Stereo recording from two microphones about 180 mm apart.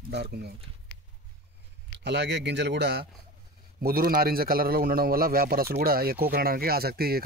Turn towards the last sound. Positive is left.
turn(degrees=-60)  # may be behind; listen again after turning